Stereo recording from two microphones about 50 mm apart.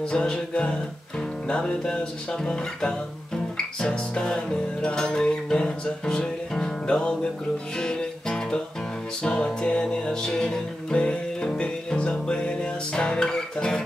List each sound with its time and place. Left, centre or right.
0.0 s music: centre